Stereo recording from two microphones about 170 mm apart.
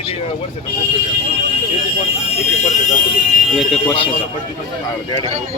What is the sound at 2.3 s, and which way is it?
Alarm, 45° left (ahead or behind).